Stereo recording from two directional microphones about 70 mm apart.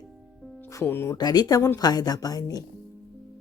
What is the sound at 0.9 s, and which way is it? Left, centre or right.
Speech, left.